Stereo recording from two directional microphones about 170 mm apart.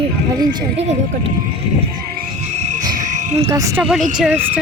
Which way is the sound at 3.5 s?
20° right (ahead or behind).